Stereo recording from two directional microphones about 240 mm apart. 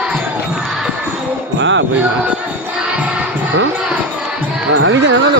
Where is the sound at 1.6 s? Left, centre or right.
Right.